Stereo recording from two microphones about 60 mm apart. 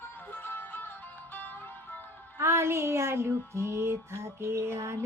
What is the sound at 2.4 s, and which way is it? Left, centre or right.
Music, right.